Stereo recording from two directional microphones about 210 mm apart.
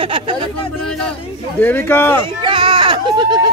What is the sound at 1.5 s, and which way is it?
Speech, 10° left (ahead or behind).